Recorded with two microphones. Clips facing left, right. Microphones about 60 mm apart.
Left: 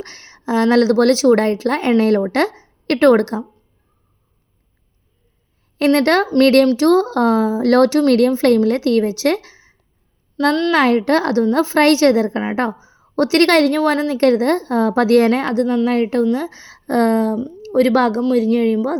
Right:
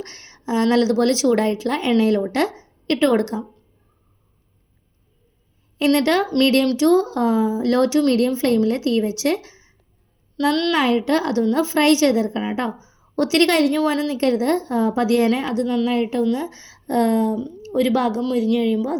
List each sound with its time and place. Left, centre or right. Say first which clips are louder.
0.0 s a woman's voice: left 3 dB; left
5.8 s a woman's voice: left 3 dB; left
10.3 s a woman's voice: left 3 dB; left
10.8 s a woman's voice: left 4 dB; left
12.5 s a woman's voice: left 5 dB; left
13.5 s a woman's voice: left 4 dB; left
15.6 s a woman's voice: left 4 dB; left
15.9 s a woman's voice: left 4 dB; left
18.4 s a woman's voice: left 3 dB; left